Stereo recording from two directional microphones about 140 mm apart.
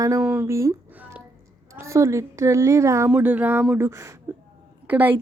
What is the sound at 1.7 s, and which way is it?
A woman's voice, 20° right (ahead or behind).